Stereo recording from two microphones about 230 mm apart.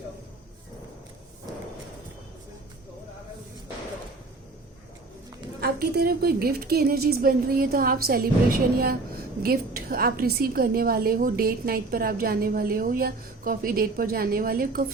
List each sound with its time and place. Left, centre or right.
5.5 s a woman's voice: right